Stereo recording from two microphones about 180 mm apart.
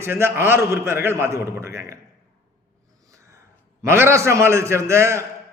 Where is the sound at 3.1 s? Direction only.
15° right (ahead or behind).